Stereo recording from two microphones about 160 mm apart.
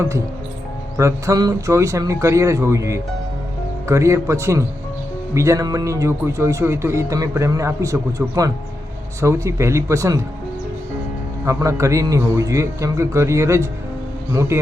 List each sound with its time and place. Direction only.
0.9 s speech: 20° right (ahead or behind)
11.4 s speech: 20° right (ahead or behind)